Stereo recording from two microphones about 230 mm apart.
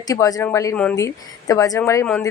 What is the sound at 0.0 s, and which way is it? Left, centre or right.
Speech, centre.